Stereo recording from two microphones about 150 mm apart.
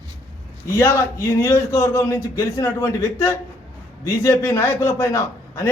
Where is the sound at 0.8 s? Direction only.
20° left (ahead or behind).